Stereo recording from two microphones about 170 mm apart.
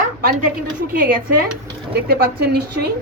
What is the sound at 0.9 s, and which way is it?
Speech, 55° right (ahead or behind).